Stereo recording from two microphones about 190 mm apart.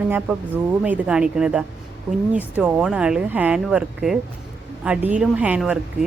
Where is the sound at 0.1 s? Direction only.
10° right (ahead or behind).